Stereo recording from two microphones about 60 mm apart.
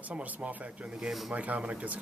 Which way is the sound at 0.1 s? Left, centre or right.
Right.